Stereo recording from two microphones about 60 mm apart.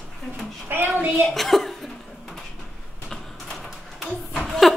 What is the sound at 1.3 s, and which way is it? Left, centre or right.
Chuckle, centre.